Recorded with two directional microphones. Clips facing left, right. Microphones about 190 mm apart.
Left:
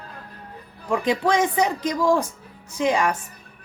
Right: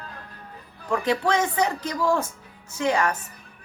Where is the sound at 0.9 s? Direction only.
15° left (ahead or behind).